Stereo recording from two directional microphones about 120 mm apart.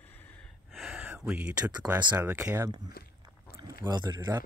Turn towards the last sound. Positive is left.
turn(degrees=-35)  # may be behind; listen again after turning